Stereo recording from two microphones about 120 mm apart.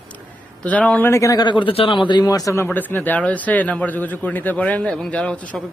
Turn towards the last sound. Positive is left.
turn(degrees=10)  # may be behind; listen again after turning